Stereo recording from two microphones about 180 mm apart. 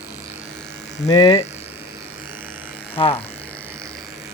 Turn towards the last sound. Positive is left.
turn(degrees=30)  # may be behind; listen again after turning